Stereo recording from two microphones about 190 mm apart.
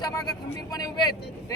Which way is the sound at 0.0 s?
20° left (ahead or behind).